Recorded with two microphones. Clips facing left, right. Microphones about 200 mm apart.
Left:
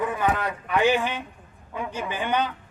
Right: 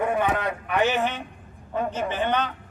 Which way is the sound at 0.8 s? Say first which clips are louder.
Left 3 dB; 15° left (ahead or behind).